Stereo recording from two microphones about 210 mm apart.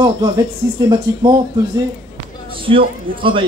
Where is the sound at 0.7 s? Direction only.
20° right (ahead or behind).